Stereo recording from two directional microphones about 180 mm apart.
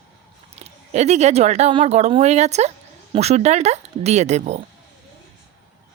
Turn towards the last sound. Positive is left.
turn(degrees=-40)  # may be behind; listen again after turning